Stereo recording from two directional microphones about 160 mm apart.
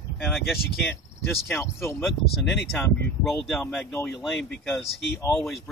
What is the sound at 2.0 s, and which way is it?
Speech, centre (ahead or behind).